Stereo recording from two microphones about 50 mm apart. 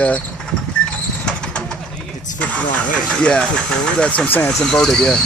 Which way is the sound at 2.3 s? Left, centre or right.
Left.